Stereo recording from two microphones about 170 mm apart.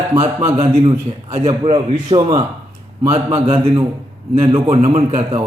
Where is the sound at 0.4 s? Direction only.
40° right (ahead or behind).